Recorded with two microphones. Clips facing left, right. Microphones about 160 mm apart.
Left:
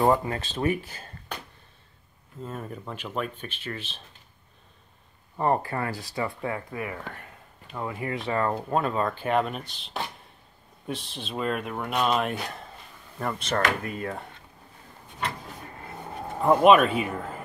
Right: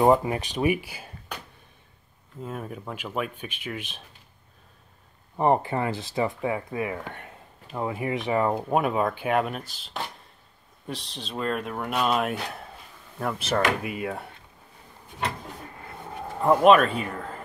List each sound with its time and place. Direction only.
0.0 s speech: 15° right (ahead or behind)
2.4 s speech: 5° right (ahead or behind)
5.4 s speech: 20° right (ahead or behind)
16.4 s speech: 5° left (ahead or behind)